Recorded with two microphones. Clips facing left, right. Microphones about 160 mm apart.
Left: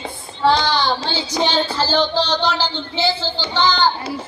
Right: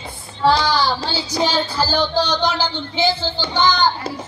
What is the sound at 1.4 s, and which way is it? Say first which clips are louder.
Speech: even; 10° right (ahead or behind).